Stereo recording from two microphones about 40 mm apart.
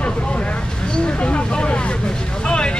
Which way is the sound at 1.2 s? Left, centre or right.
Left.